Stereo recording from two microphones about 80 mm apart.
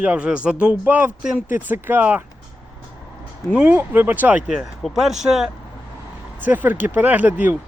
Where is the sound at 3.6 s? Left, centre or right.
Right.